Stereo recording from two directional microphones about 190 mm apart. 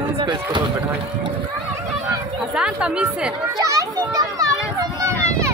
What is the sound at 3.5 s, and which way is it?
Children playing, 20° right (ahead or behind).